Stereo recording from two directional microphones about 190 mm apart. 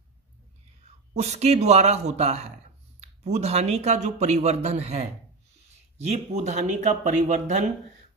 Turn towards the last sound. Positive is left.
turn(degrees=-40)  # may be behind; listen again after turning